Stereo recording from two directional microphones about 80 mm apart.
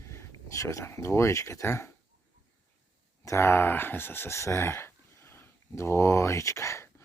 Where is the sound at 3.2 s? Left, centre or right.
Left.